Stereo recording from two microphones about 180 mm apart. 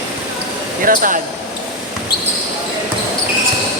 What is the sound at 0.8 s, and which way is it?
Speech, 50° right (ahead or behind).